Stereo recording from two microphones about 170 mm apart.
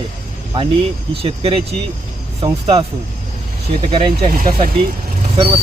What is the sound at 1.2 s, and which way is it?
Speech, 35° right (ahead or behind).